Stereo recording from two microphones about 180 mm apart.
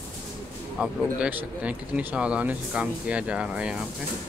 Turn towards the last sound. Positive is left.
turn(degrees=-5)  # may be behind; listen again after turning